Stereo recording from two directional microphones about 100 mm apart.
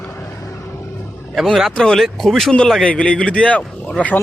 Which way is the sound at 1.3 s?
Centre (ahead or behind).